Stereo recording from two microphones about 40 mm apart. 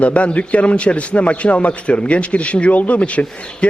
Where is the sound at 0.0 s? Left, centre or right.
Left.